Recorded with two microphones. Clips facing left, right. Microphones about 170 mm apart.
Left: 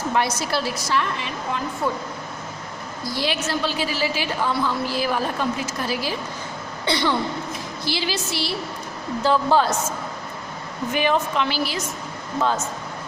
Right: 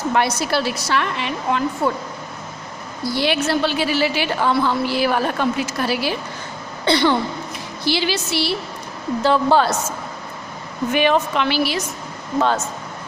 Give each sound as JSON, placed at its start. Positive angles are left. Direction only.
{"t": 0.2, "sound": "a woman's voice", "side_deg": -65}
{"t": 3.2, "sound": "a woman's voice", "side_deg": -65}
{"t": 10.9, "sound": "a woman's voice", "side_deg": -70}